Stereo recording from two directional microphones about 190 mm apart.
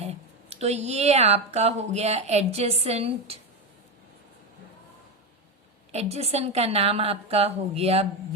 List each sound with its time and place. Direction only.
0.0 s speech: 35° right (ahead or behind)
5.9 s speech: 35° right (ahead or behind)